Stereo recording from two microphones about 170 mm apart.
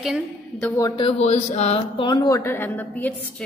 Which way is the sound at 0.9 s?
30° left (ahead or behind).